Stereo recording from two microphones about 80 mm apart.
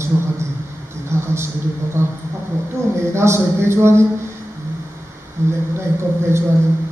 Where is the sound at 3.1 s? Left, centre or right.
Right.